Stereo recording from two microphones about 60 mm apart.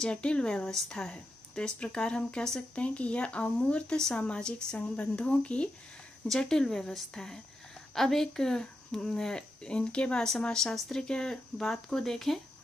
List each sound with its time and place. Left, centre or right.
0.0 s speech: centre
2.7 s speech: centre
6.2 s speech: centre